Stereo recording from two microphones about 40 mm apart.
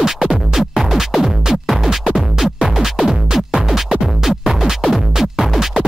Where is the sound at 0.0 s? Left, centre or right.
Centre.